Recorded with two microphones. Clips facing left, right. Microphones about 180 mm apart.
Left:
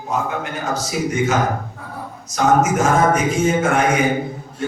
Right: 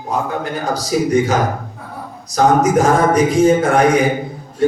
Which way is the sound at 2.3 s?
35° right (ahead or behind).